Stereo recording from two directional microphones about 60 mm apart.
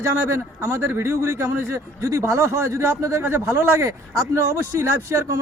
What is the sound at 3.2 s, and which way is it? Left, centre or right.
Speech, right.